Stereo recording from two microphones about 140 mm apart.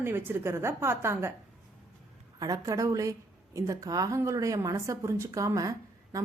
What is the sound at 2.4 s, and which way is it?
A woman's voice, 25° right (ahead or behind).